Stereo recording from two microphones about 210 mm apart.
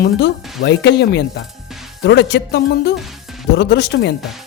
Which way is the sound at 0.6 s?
55° left (ahead or behind).